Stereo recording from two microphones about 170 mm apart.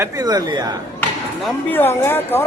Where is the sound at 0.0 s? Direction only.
20° right (ahead or behind).